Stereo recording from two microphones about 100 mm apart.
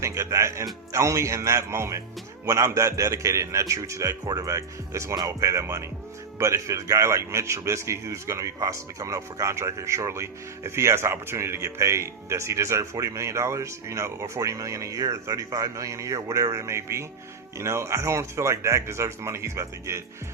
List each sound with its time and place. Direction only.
0.0 s a man's voice: 30° right (ahead or behind)